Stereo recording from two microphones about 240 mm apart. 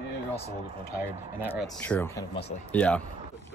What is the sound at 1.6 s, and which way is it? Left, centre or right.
Speech, centre.